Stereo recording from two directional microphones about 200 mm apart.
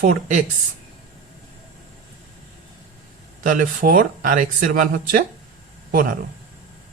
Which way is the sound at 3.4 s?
45° right (ahead or behind).